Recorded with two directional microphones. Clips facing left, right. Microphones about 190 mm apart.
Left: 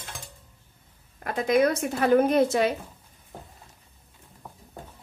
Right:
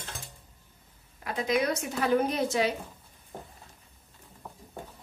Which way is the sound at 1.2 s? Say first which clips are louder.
Left 6 dB; 50° left (ahead or behind).